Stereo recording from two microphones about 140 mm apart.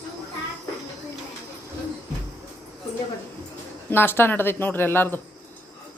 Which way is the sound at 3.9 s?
15° left (ahead or behind).